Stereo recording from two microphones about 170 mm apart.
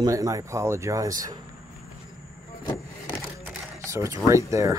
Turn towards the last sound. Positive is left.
turn(degrees=-15)  # may be behind; listen again after turning